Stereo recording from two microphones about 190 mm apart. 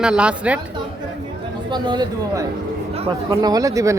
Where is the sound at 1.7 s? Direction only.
25° right (ahead or behind).